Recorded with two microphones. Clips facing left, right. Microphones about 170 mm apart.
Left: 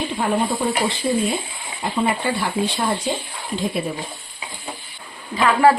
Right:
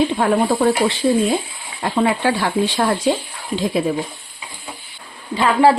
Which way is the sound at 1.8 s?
85° right.